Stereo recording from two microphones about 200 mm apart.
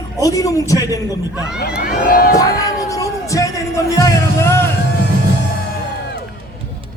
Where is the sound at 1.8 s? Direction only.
45° left (ahead or behind).